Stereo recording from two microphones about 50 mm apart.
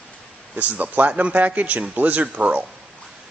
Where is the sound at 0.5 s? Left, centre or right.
Right.